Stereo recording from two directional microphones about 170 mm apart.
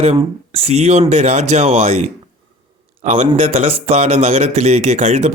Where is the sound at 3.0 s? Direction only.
40° right (ahead or behind).